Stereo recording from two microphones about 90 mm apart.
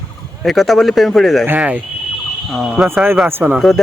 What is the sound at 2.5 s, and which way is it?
Speech, centre (ahead or behind).